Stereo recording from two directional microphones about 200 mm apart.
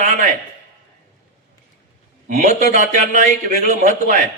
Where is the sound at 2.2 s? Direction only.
35° right (ahead or behind).